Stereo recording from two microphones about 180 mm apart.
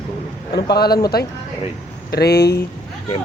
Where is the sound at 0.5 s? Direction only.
60° left (ahead or behind).